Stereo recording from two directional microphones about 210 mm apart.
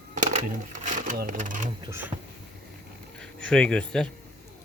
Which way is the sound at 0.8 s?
40° right (ahead or behind).